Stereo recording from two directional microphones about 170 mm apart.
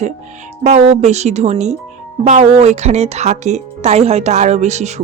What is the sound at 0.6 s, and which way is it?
Speech, 40° right (ahead or behind).